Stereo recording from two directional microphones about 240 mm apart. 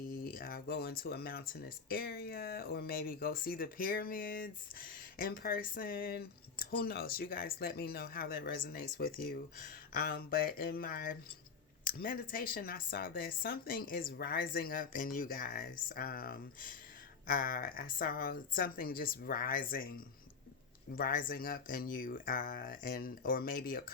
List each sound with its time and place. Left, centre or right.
0.1 s speech: left
20.9 s speech: left